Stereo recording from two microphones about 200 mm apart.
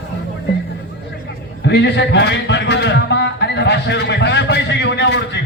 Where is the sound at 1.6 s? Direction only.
60° left (ahead or behind).